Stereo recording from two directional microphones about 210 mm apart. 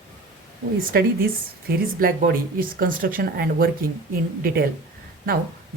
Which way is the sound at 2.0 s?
45° right (ahead or behind).